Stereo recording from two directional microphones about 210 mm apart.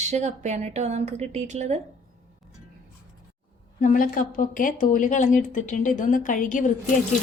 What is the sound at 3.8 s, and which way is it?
A woman's voice, 40° left (ahead or behind).